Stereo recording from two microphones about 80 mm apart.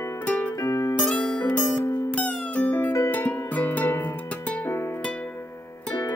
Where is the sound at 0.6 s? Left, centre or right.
Left.